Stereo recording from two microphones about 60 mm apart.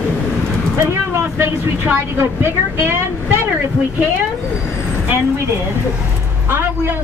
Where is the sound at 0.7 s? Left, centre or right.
Right.